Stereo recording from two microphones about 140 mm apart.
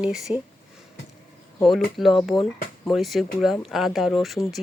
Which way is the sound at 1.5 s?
Centre (ahead or behind).